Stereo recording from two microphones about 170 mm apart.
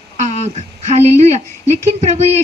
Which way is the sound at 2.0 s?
45° right (ahead or behind).